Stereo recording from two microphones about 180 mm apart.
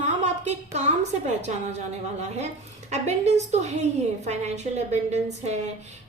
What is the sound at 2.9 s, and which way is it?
A woman's voice, 40° right (ahead or behind).